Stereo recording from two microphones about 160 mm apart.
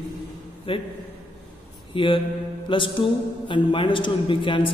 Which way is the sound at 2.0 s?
30° left (ahead or behind).